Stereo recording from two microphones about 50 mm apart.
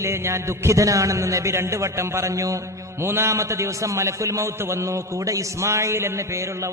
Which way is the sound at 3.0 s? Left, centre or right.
Right.